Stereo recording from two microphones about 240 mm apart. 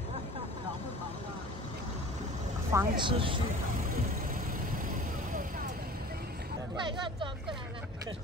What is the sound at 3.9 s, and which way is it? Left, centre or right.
Vehicle, right.